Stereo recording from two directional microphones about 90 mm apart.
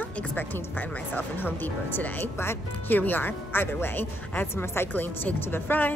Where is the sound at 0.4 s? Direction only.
20° left (ahead or behind).